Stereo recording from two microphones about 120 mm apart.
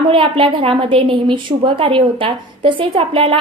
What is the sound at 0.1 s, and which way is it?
A woman's voice, 45° right (ahead or behind).